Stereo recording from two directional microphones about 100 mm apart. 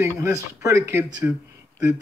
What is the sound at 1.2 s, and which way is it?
Speech, 15° right (ahead or behind).